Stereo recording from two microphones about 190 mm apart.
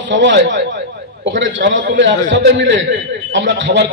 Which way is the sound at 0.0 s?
70° right (ahead or behind).